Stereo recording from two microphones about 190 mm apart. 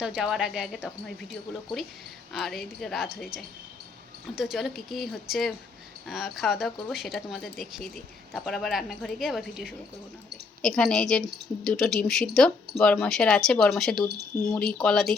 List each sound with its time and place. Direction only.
0.0 s speech: 5° right (ahead or behind)
2.3 s speech: centre (ahead or behind)